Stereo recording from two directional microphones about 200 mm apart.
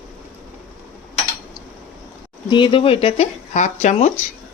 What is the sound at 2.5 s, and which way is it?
Speech, 25° left (ahead or behind).